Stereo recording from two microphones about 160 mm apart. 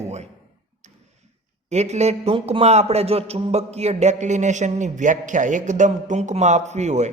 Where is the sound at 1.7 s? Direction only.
45° right (ahead or behind).